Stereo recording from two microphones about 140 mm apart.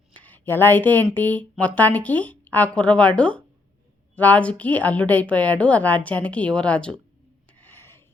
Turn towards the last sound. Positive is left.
turn(degrees=15)  # may be behind; listen again after turning